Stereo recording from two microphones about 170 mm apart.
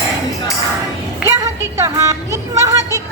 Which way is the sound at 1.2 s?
15° right (ahead or behind).